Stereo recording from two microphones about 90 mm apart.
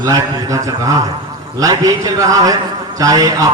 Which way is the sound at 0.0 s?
40° right (ahead or behind).